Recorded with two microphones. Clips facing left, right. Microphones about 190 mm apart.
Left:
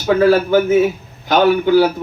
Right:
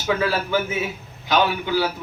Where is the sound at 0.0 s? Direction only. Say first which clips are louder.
Left 10 dB; 45° left (ahead or behind).